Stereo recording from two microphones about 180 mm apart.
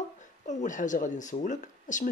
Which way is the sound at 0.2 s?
40° left (ahead or behind).